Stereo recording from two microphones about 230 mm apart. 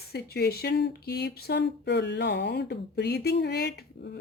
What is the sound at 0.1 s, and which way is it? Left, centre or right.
Speech, left.